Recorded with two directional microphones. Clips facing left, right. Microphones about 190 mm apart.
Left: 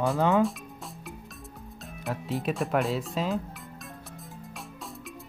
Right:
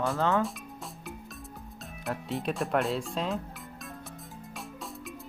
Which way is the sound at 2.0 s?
Centre (ahead or behind).